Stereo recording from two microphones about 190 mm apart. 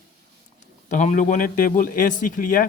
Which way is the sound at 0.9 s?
40° left (ahead or behind).